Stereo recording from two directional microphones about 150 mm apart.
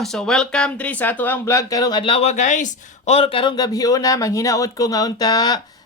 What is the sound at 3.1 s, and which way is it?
A man's voice, 40° left (ahead or behind).